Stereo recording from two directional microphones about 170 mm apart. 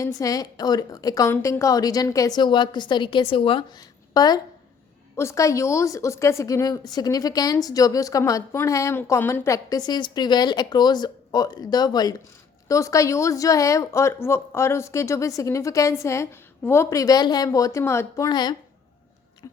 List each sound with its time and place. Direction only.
0.0 s a woman's voice: 20° left (ahead or behind)